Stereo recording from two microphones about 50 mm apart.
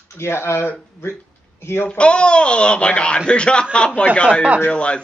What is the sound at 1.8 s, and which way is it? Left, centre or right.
A man's voice, left.